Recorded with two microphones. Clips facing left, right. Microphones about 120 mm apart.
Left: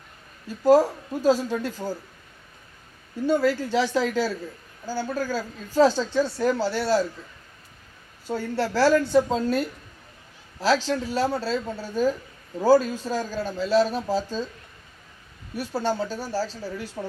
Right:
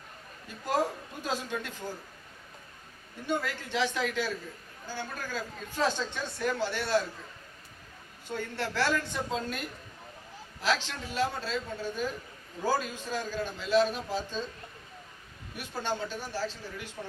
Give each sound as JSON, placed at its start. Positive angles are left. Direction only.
{"t": 0.5, "sound": "speech", "side_deg": 35}
{"t": 3.2, "sound": "speech", "side_deg": 35}
{"t": 8.3, "sound": "speech", "side_deg": 35}
{"t": 15.5, "sound": "speech", "side_deg": 35}